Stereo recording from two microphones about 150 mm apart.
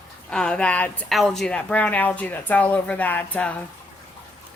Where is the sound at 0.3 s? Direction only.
5° left (ahead or behind).